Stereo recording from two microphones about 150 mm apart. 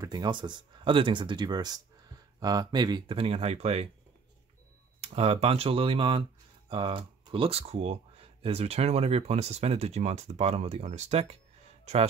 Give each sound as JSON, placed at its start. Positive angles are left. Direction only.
{"t": 0.0, "sound": "speech", "side_deg": -30}
{"t": 5.0, "sound": "speech", "side_deg": -40}